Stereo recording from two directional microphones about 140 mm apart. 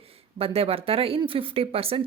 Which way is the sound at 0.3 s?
45° right (ahead or behind).